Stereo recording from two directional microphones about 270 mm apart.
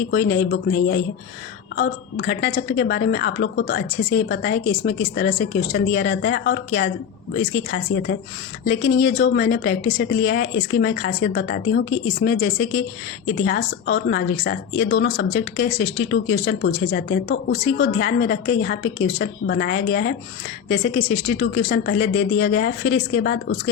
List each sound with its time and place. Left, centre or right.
0.1 s speech: left